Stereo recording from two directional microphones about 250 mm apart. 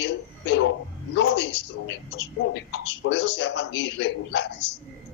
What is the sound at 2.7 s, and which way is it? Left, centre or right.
Speech, left.